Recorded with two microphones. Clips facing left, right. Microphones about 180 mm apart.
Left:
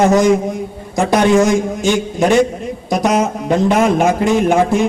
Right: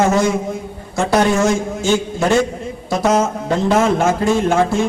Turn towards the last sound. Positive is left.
turn(degrees=15)  # may be behind; listen again after turning